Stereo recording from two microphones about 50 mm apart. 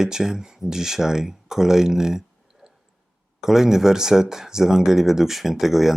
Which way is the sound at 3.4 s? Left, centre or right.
Centre.